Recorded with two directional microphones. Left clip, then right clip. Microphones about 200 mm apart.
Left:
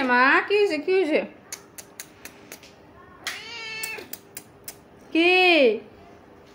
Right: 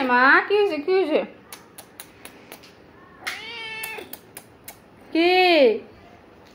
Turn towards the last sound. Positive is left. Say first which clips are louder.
# right 1 dB
turn(degrees=20)  # may be behind; listen again after turning